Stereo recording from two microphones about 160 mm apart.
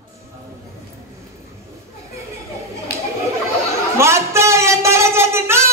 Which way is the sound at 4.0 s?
15° right (ahead or behind).